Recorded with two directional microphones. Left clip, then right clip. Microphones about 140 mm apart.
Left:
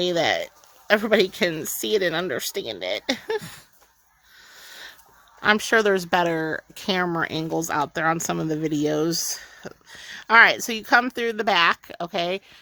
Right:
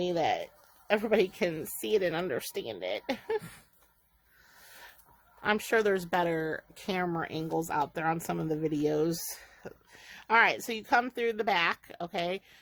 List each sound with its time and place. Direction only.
0.0 s speech: 50° left (ahead or behind); by 3.4 s 35° left (ahead or behind)
5.4 s speech: 40° left (ahead or behind)